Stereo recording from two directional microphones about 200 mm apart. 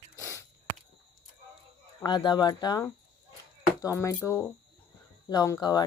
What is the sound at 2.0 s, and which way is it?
Speech, 20° left (ahead or behind).